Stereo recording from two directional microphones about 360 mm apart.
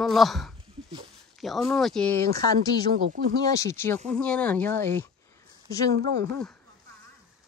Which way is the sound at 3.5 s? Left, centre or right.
Centre.